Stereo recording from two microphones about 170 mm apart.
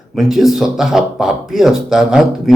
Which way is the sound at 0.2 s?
Centre (ahead or behind).